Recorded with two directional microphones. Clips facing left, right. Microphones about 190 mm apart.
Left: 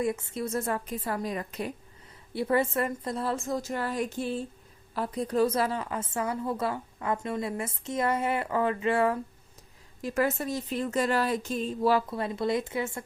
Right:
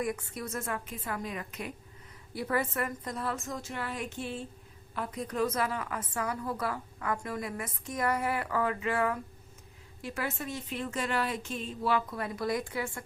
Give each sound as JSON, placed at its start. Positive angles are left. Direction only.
{"t": 0.0, "sound": "a woman's voice", "side_deg": 25}
{"t": 10.0, "sound": "a woman's voice", "side_deg": 40}